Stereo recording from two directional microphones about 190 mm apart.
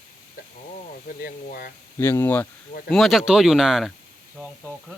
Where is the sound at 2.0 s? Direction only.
15° left (ahead or behind).